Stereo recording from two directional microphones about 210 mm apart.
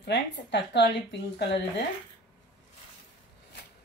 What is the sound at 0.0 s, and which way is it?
Speech, 55° left (ahead or behind).